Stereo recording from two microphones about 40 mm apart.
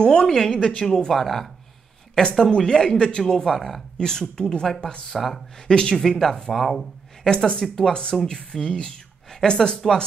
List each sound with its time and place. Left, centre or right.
0.0 s a woman's voice: centre
2.3 s a woman's voice: centre
6.0 s a woman's voice: centre
7.2 s speech: left